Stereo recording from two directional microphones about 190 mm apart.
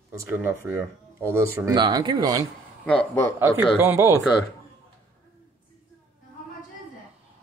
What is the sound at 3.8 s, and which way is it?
Speech, 10° right (ahead or behind).